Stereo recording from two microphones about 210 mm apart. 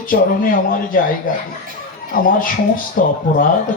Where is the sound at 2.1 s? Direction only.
40° left (ahead or behind).